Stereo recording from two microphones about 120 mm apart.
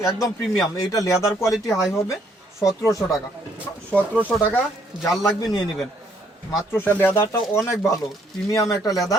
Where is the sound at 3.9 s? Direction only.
15° left (ahead or behind).